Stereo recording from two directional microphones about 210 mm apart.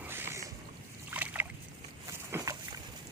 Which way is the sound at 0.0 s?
10° right (ahead or behind).